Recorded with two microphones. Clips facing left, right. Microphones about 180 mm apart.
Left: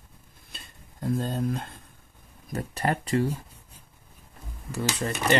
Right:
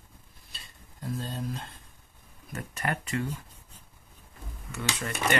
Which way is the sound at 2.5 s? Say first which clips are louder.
Left 5 dB; 35° left (ahead or behind).